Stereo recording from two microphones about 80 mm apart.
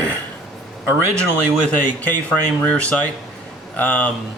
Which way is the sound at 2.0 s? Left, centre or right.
Centre.